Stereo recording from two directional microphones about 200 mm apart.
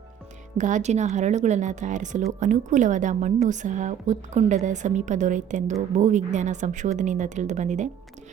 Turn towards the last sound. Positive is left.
turn(degrees=-35)  # may be behind; listen again after turning